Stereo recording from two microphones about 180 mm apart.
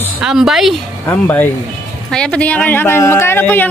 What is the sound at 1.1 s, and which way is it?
Speech, 10° left (ahead or behind).